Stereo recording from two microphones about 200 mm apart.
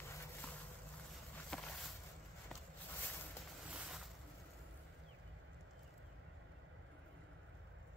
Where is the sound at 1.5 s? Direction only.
5° left (ahead or behind).